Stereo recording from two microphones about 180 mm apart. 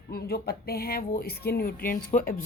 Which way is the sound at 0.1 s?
60° left (ahead or behind).